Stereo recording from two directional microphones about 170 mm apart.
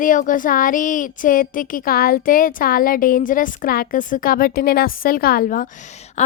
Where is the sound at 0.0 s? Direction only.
50° left (ahead or behind).